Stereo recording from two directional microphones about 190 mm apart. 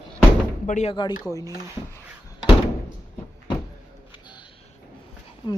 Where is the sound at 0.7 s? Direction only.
40° left (ahead or behind).